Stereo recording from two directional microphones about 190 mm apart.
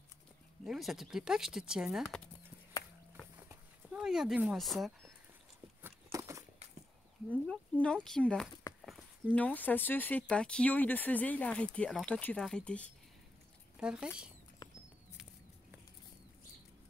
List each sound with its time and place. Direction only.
0.7 s speech: centre (ahead or behind)
3.4 s a sound: 5° right (ahead or behind)
6.1 s walk: 15° right (ahead or behind)
7.4 s speech: 5° left (ahead or behind)
13.7 s speech: 5° right (ahead or behind)